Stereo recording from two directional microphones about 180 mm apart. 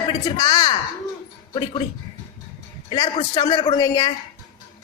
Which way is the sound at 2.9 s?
25° left (ahead or behind).